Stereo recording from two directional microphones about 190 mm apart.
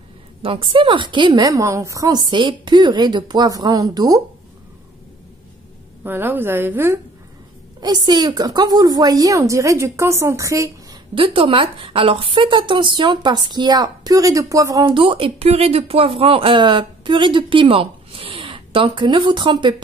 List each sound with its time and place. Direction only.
0.4 s a woman's voice: 25° right (ahead or behind)
6.0 s a woman's voice: 10° right (ahead or behind)